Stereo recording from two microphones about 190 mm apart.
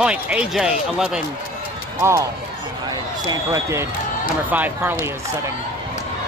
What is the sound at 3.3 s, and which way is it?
Speech, 15° right (ahead or behind).